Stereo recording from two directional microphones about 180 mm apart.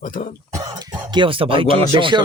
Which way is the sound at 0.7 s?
25° right (ahead or behind).